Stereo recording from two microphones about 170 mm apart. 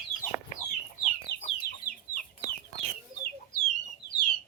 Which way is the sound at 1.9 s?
60° left (ahead or behind).